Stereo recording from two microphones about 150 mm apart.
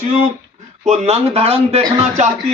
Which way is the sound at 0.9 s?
45° right (ahead or behind).